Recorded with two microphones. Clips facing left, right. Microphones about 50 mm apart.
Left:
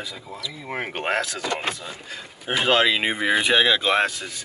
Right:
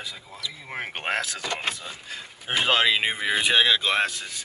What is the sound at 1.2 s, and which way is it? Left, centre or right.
Speech, centre.